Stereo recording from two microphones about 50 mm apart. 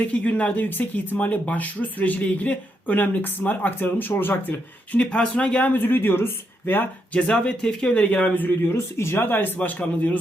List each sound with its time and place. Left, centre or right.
0.1 s speech: left
4.9 s speech: left
7.1 s speech: left
8.6 s speech: left
9.2 s speech: left